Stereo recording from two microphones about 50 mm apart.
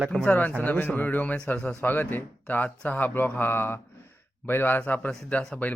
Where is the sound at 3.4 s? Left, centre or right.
Left.